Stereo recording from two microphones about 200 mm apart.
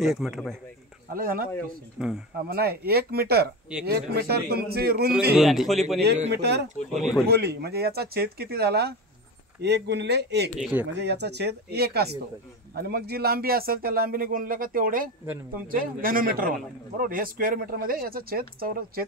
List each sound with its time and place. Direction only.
0.0 s a man's voice: centre (ahead or behind)
1.0 s a man's voice: 45° right (ahead or behind)
2.0 s a man's voice: 5° right (ahead or behind)
2.4 s a man's voice: 50° right (ahead or behind)
5.3 s a man's voice: centre (ahead or behind)
6.3 s a man's voice: 55° right (ahead or behind)
10.6 s a man's voice: 5° right (ahead or behind)
10.9 s a man's voice: 55° right (ahead or behind)